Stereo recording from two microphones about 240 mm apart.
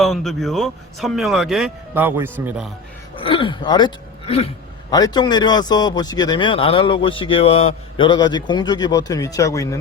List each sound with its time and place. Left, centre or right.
0.0 s speech: centre
3.2 s a man's voice: left